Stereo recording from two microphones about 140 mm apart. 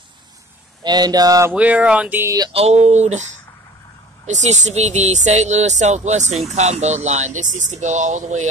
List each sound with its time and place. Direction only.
0.8 s speech: 30° right (ahead or behind)
1.5 s speech: 10° right (ahead or behind)
2.5 s speech: 50° right (ahead or behind)
4.3 s speech: 55° right (ahead or behind)